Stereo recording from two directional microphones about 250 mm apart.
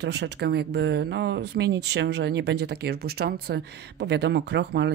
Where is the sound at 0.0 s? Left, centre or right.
Right.